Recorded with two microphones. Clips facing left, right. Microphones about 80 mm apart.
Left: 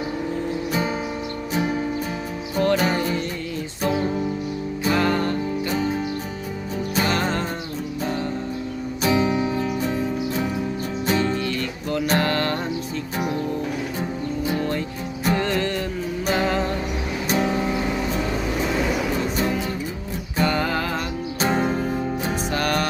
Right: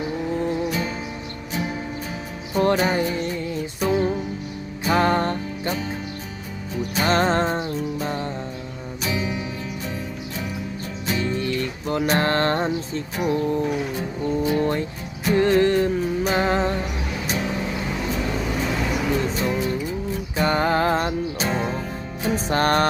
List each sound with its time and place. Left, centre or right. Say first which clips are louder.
2.6 s music: right 1 dB; right
4.9 s music: right 2 dB; right
7.0 s music: right 5 dB; right
9.0 s music: left 7 dB; left
11.1 s music: left 3 dB; left
11.3 s music: right 1 dB; right
15.4 s music: right 6 dB; right
20.4 s music: right 2 dB; right
21.5 s music: left 6 dB; left
22.4 s music: right 5 dB; right